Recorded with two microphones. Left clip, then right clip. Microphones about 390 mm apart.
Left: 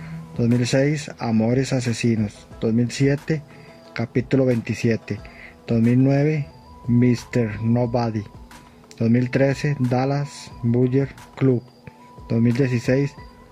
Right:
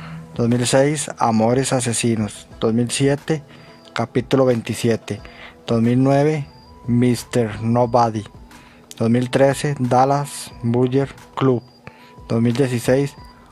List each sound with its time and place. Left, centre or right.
0.4 s speech: right